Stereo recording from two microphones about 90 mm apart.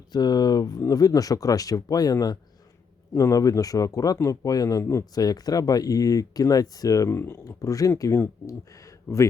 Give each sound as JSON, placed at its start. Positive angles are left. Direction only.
{"t": 0.1, "sound": "speech", "side_deg": 50}